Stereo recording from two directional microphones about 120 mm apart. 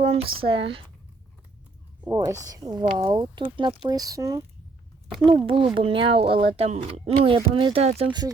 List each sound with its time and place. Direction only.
0.0 s speech: 55° right (ahead or behind)
2.0 s speech: 25° right (ahead or behind)
5.5 s speech: 45° right (ahead or behind)